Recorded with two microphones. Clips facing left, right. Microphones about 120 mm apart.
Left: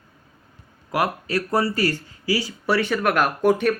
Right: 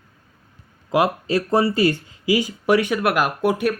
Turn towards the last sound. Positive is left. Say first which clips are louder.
# left 1 dB
turn(degrees=-5)  # may be behind; listen again after turning